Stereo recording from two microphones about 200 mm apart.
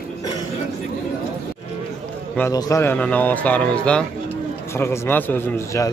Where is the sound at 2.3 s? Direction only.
15° left (ahead or behind).